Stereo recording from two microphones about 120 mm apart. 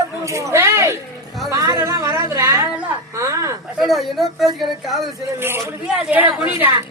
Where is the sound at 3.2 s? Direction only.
25° right (ahead or behind).